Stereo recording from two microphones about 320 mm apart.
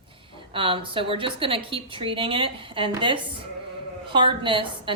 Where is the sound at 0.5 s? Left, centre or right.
Centre.